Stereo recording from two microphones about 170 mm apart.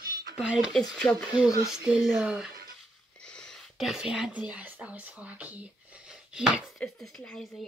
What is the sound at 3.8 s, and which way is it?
Speech, 5° right (ahead or behind).